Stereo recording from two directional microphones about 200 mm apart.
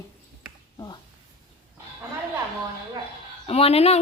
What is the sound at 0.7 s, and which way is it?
Speech, 20° left (ahead or behind).